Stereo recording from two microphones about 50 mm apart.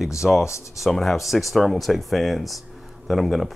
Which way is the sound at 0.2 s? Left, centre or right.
Centre.